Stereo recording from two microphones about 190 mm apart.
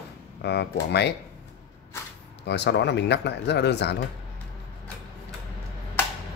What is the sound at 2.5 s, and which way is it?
Speech, 65° left (ahead or behind).